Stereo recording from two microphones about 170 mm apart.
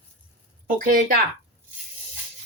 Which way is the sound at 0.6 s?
55° right (ahead or behind).